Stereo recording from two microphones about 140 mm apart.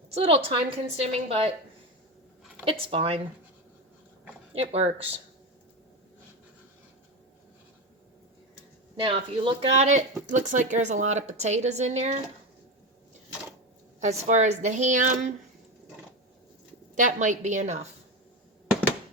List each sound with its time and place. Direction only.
0.1 s a woman's voice: 45° right (ahead or behind)
2.6 s speech: 40° right (ahead or behind)
4.5 s a woman's voice: 45° right (ahead or behind)
9.0 s speech: 35° right (ahead or behind)
9.7 s a woman's voice: 55° right (ahead or behind)
14.0 s a woman's voice: 55° right (ahead or behind)
16.9 s a woman's voice: 65° right (ahead or behind)